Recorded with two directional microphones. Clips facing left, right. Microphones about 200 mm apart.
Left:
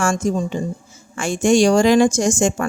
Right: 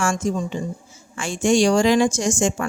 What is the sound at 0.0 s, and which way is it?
A woman's voice, 45° left (ahead or behind).